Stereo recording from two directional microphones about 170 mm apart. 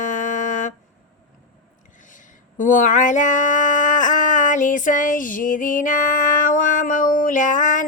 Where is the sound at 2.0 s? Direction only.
50° left (ahead or behind).